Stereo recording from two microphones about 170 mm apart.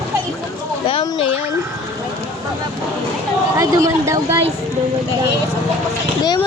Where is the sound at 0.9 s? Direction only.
35° left (ahead or behind).